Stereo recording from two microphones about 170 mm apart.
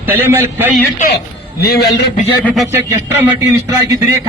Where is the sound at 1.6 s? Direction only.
70° left (ahead or behind).